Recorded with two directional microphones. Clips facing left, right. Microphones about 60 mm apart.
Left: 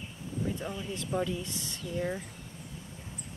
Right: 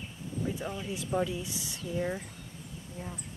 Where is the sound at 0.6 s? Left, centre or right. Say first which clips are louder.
Right 1 dB; centre.